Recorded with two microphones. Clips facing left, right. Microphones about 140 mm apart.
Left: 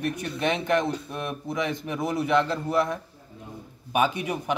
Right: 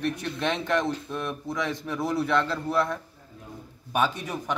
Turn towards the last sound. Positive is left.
turn(degrees=10)  # may be behind; listen again after turning